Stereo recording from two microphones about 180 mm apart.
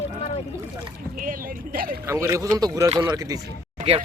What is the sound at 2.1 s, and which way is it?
Speech, 15° right (ahead or behind).